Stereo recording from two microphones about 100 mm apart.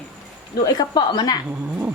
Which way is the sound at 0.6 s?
40° left (ahead or behind).